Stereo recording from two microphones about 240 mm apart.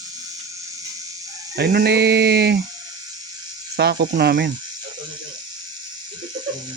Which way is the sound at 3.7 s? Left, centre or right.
Right.